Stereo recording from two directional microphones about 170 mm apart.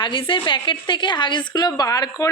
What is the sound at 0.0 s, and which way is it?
A woman's voice, 30° left (ahead or behind).